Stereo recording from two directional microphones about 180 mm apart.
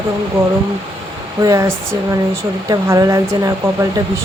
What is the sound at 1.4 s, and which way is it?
Speech, 15° right (ahead or behind).